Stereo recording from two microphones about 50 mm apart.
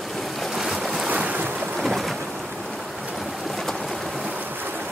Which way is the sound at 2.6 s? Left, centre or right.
Centre.